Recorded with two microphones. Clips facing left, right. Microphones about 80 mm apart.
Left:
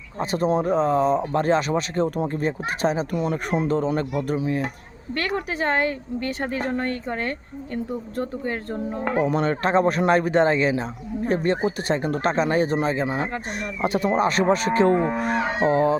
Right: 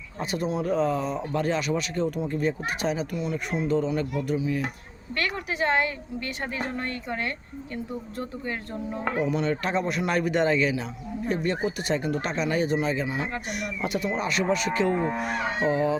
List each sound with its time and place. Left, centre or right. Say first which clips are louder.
0.2 s speech: left 6 dB; left
3.2 s speech: left 5 dB; left